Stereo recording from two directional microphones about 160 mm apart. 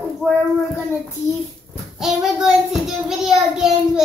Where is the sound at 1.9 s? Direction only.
5° right (ahead or behind).